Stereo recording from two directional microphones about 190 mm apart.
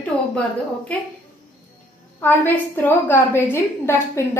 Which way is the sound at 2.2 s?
10° left (ahead or behind).